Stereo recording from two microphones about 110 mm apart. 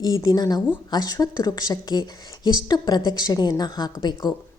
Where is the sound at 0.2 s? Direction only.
35° left (ahead or behind).